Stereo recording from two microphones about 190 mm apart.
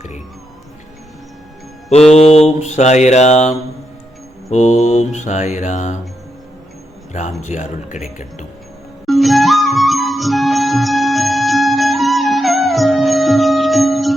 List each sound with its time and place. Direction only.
2.3 s mantra: 35° left (ahead or behind)
7.4 s mantra: 40° left (ahead or behind)
9.0 s music: centre (ahead or behind)